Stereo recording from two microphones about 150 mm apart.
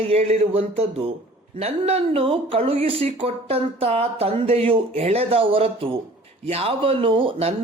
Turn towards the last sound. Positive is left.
turn(degrees=-40)  # may be behind; listen again after turning